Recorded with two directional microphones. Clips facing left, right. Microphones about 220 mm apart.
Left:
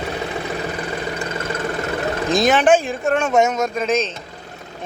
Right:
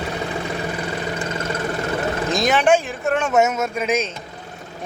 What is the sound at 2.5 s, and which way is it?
Speech, 35° left (ahead or behind).